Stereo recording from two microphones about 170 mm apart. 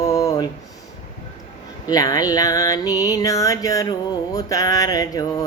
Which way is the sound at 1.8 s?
20° left (ahead or behind).